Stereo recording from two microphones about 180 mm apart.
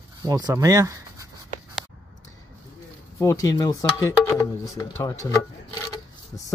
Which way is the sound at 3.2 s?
20° left (ahead or behind).